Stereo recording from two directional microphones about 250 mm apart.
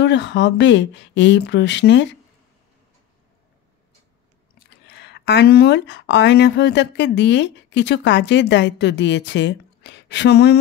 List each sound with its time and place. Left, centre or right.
0.0 s speech: left
4.6 s speech: left